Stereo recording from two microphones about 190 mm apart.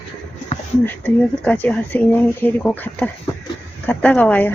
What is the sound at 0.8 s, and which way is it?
Speech, 10° left (ahead or behind).